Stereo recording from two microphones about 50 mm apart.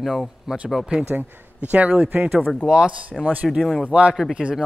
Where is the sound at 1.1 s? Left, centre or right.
Right.